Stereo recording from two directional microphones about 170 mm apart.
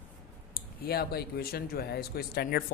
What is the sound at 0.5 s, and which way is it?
Speech, 65° left (ahead or behind).